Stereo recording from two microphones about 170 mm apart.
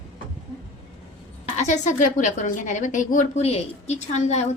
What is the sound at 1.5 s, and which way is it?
A woman's voice, 45° left (ahead or behind).